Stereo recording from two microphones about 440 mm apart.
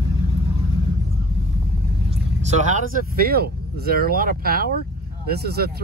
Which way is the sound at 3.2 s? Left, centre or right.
Right.